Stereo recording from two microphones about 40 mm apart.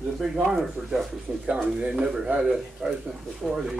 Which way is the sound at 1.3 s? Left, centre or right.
Right.